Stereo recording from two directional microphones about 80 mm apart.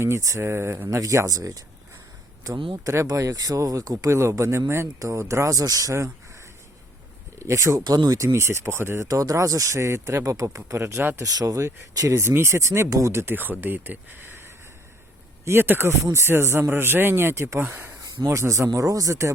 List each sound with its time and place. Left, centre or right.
0.0 s speech: right
0.9 s speech: right
2.8 s speech: right
7.3 s speech: right
7.9 s speech: right
8.2 s speech: right
9.0 s speech: right
11.2 s speech: right
17.6 s speech: centre
18.3 s speech: right